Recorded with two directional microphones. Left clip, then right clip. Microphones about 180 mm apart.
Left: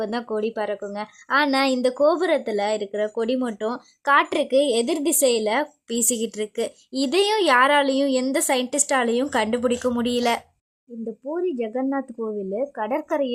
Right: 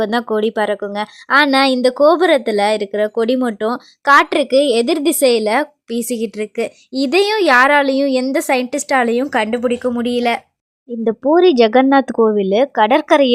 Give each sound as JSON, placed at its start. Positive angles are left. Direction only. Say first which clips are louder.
{"t": 0.0, "sound": "a woman's voice", "louder": "right 9 dB", "side_deg": -35}
{"t": 11.0, "sound": "speech", "louder": "right 15 dB", "side_deg": -40}